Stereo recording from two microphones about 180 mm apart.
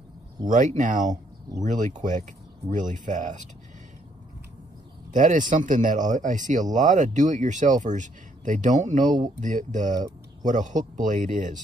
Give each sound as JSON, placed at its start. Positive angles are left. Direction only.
{"t": 0.5, "sound": "speech", "side_deg": -45}
{"t": 5.1, "sound": "speech", "side_deg": -45}